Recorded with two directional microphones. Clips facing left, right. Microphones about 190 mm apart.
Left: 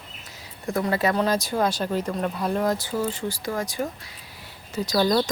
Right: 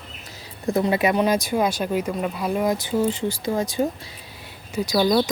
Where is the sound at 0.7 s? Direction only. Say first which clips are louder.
Right 3 dB; 20° right (ahead or behind).